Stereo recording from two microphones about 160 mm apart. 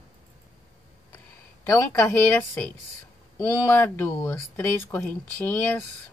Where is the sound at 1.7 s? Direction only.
15° left (ahead or behind).